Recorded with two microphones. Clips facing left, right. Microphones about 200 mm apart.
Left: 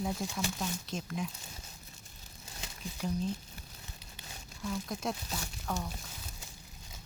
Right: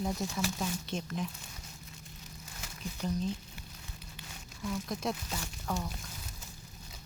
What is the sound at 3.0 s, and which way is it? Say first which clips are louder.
Speech: even; centre (ahead or behind).